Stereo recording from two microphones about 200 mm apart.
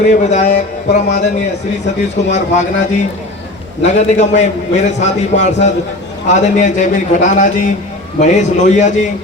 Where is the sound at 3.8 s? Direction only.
35° left (ahead or behind).